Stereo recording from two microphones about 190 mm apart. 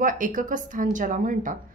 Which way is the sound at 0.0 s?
45° right (ahead or behind).